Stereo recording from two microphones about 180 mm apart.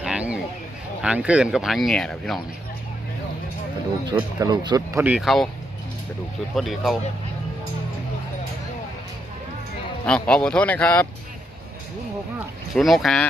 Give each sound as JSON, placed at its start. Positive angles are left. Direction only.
{"t": 0.0, "sound": "a sound", "side_deg": -5}
{"t": 1.0, "sound": "speech", "side_deg": -5}
{"t": 4.1, "sound": "speech", "side_deg": -25}
{"t": 5.1, "sound": "speech", "side_deg": 0}
{"t": 6.6, "sound": "speech", "side_deg": 0}
{"t": 10.1, "sound": "speech", "side_deg": 5}
{"t": 12.7, "sound": "speech", "side_deg": 0}